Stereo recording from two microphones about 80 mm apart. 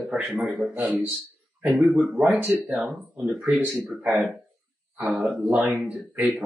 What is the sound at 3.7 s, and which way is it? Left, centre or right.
Speech, centre.